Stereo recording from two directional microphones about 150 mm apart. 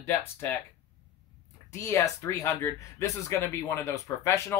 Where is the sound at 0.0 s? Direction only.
15° left (ahead or behind).